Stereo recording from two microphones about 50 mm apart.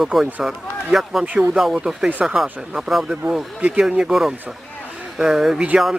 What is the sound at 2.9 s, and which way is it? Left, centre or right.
Speech, centre.